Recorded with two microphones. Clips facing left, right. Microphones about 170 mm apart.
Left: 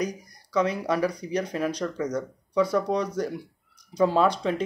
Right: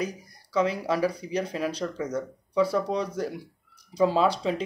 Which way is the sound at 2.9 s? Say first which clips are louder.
Left 2 dB; 30° right (ahead or behind).